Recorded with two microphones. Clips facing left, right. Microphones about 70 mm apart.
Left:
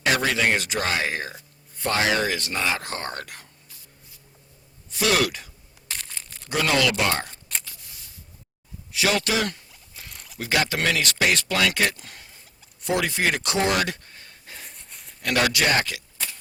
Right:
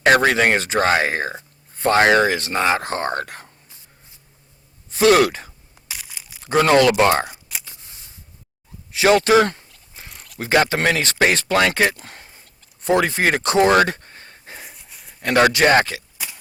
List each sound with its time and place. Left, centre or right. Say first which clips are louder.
0.0 s speech: right 7 dB; right
2.0 s speech: right 8 dB; right
4.9 s speech: right 8 dB; right
5.9 s a sound: even; centre
6.5 s speech: right 8 dB; right
7.6 s scissors: right 1 dB; right
8.9 s zipper: right 9 dB; right
10.4 s speech: right 6 dB; right
14.6 s a sound: right 3 dB; centre
15.2 s speech: right 7 dB; right
16.1 s pig: right 1 dB; centre